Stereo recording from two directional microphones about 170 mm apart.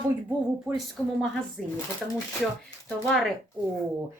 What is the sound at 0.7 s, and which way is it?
Speech, 5° right (ahead or behind).